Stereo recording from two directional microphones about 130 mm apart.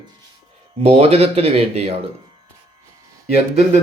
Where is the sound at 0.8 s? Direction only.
50° right (ahead or behind).